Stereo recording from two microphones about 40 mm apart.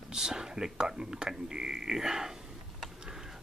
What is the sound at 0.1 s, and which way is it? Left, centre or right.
Speech, centre.